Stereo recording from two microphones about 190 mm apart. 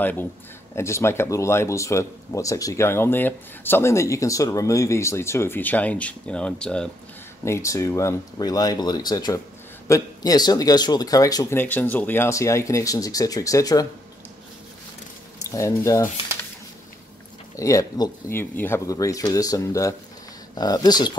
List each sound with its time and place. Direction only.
0.7 s speech: 15° left (ahead or behind)
7.4 s speech: 15° left (ahead or behind)
15.4 s speech: 15° left (ahead or behind)
17.6 s speech: 15° left (ahead or behind)